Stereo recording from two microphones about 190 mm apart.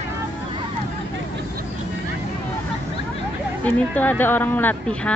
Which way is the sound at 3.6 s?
10° left (ahead or behind).